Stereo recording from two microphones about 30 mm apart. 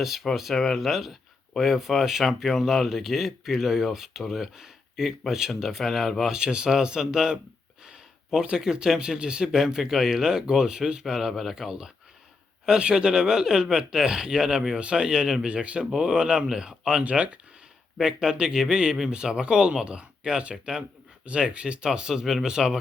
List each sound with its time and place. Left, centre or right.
0.0 s speech: centre
0.8 s speech: centre
4.5 s a sound: centre
5.4 s speech: centre
5.8 s speech: centre
6.3 s speech: right
11.0 s speech: centre
12.8 s speech: right
15.4 s speech: right
16.0 s speech: right
17.0 s speech: right
18.0 s speech: right
21.8 s speech: centre